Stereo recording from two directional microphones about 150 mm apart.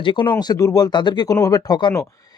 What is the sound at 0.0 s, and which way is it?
Speech, 30° left (ahead or behind).